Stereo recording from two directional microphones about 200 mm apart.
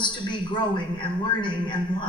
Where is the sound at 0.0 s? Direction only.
25° left (ahead or behind).